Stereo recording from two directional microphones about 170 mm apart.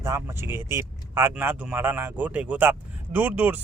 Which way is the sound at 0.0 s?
15° right (ahead or behind).